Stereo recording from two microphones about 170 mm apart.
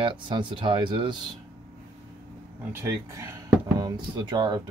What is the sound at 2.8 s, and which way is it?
Speech, 20° right (ahead or behind).